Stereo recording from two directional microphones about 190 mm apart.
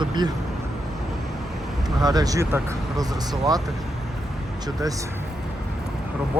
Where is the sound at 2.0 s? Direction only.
20° right (ahead or behind).